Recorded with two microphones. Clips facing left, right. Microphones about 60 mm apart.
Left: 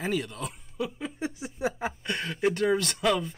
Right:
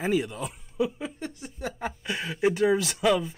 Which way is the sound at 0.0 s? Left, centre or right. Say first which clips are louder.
Right 4 dB; centre.